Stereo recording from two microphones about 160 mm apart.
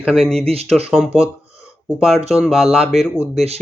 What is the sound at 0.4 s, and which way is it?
Speech, 40° right (ahead or behind).